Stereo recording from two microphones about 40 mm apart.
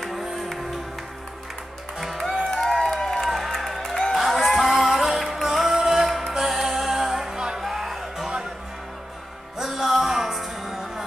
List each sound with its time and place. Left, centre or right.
0.4 s music: centre
2.5 s a sound: centre
3.3 s music: centre
7.3 s music: right
7.6 s music: centre
9.6 s music: centre